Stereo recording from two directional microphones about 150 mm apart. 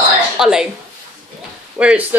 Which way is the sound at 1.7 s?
10° right (ahead or behind).